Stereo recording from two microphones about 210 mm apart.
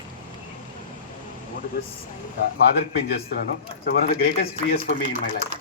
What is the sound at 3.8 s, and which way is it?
Speech, 45° left (ahead or behind).